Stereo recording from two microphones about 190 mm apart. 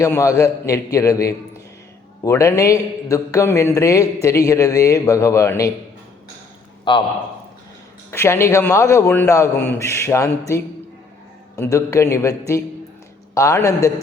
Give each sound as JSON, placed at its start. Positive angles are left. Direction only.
{"t": 0.0, "sound": "a man's voice", "side_deg": 15}
{"t": 6.9, "sound": "a man's voice", "side_deg": 25}
{"t": 8.1, "sound": "a man's voice", "side_deg": 15}